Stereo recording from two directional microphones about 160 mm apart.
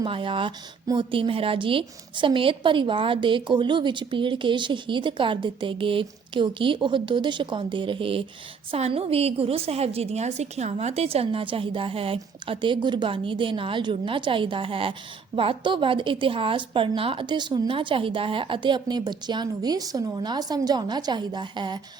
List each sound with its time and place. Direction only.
0.0 s a woman's voice: 30° right (ahead or behind)